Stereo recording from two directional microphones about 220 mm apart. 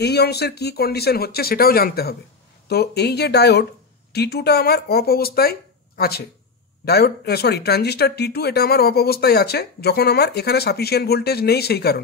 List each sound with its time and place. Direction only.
0.0 s speech: 50° left (ahead or behind)